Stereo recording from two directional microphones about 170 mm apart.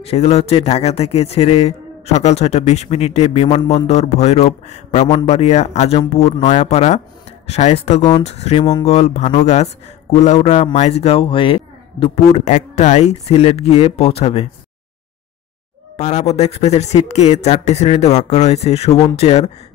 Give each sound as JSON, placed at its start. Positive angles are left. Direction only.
{"t": 0.0, "sound": "a man's voice", "side_deg": 35}
{"t": 5.0, "sound": "a man's voice", "side_deg": 25}
{"t": 5.3, "sound": "a man's voice", "side_deg": 40}
{"t": 16.0, "sound": "a man's voice", "side_deg": 40}